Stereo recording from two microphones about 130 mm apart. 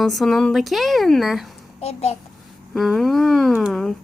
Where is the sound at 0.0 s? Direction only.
Centre (ahead or behind).